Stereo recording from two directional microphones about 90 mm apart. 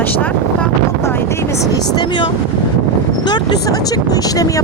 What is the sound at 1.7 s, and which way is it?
Speech, 50° left (ahead or behind).